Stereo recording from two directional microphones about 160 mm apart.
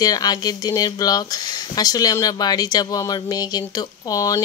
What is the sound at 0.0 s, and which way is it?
Speech, 25° left (ahead or behind).